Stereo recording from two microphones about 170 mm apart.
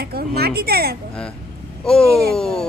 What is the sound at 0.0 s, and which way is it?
Speech, 65° right (ahead or behind).